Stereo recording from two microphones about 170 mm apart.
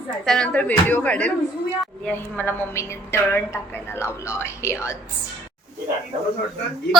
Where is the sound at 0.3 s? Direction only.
5° left (ahead or behind).